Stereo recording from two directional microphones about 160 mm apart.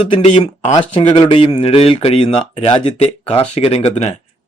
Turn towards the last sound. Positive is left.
turn(degrees=40)  # may be behind; listen again after turning